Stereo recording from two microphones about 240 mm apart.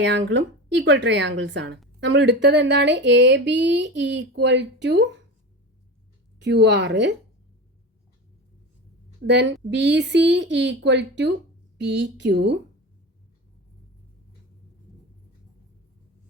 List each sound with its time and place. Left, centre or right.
0.0 s speech: right
6.4 s speech: right
9.2 s speech: right